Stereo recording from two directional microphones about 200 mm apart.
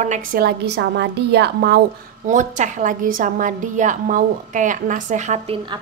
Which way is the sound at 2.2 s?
40° right (ahead or behind).